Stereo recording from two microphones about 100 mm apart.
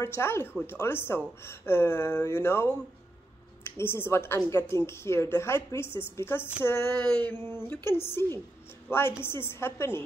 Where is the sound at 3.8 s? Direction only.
25° left (ahead or behind).